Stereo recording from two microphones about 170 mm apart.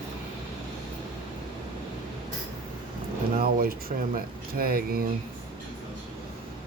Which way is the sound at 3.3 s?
60° right (ahead or behind).